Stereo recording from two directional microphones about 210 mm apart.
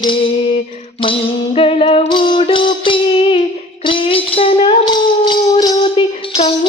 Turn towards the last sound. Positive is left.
turn(degrees=25)  # may be behind; listen again after turning